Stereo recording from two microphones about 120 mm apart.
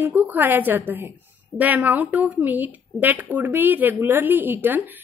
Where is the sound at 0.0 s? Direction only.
15° right (ahead or behind).